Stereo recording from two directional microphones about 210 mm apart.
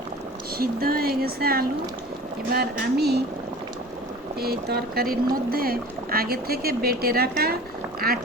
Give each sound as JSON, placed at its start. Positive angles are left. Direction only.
{"t": 0.6, "sound": "speech", "side_deg": -45}
{"t": 4.4, "sound": "speech", "side_deg": -50}